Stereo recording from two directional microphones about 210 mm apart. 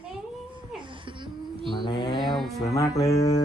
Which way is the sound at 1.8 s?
20° left (ahead or behind).